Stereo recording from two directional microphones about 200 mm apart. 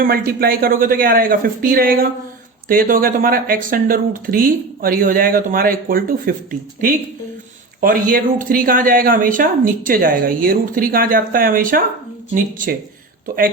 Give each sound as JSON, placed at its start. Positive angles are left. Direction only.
{"t": 0.0, "sound": "speech", "side_deg": -45}